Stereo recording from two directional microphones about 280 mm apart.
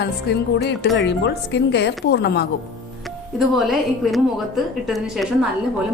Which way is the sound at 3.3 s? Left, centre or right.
Centre.